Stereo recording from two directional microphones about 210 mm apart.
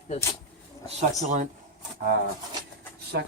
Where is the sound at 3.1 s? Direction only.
50° right (ahead or behind).